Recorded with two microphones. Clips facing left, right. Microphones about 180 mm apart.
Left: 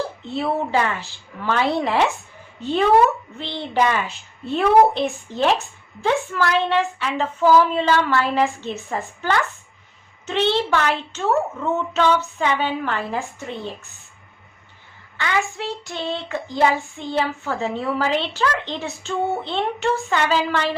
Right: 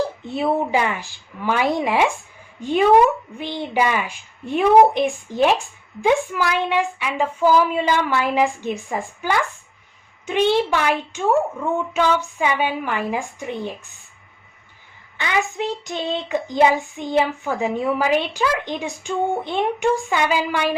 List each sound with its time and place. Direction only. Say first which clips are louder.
0.2 s child singing: right 2 dB; 15° right (ahead or behind)
15.2 s child singing: right 1 dB; 15° right (ahead or behind)